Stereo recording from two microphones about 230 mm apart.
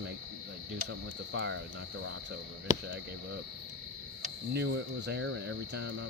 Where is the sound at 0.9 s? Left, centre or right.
Right.